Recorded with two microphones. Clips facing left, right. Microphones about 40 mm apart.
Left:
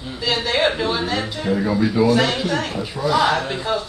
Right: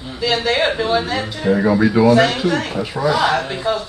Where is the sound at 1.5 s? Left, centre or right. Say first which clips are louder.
Right 5 dB; centre.